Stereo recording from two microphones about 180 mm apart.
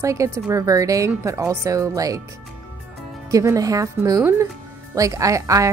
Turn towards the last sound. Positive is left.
turn(degrees=-20)  # may be behind; listen again after turning